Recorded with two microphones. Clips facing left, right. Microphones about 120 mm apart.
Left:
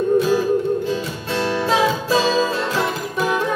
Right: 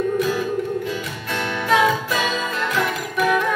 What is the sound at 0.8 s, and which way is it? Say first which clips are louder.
Music: left 4 dB; 30° left (ahead or behind).